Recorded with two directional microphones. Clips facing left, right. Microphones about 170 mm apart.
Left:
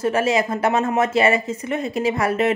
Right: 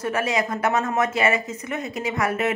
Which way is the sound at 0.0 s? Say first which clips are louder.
Left 5 dB; 25° left (ahead or behind).